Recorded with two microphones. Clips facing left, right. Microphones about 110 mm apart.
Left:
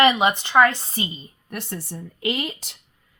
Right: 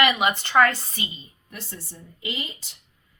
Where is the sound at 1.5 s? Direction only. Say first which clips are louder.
Left 8 dB; 65° left (ahead or behind).